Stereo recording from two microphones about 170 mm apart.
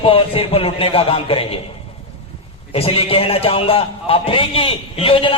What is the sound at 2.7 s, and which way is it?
A man's voice, 35° left (ahead or behind).